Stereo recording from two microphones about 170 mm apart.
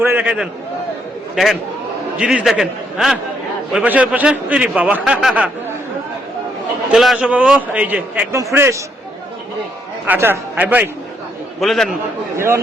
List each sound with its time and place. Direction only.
0.0 s speech: 10° right (ahead or behind)
2.1 s a man's voice: 5° right (ahead or behind)
6.9 s speech: centre (ahead or behind)
10.1 s a man's voice: 10° right (ahead or behind)